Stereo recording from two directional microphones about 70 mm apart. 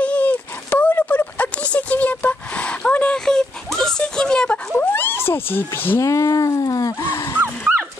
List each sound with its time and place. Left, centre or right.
0.0 s a sound: left
4.7 s wild animals: left
5.9 s speech: left
7.0 s speech: left